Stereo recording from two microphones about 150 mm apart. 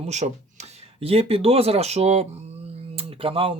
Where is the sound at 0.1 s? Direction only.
50° right (ahead or behind).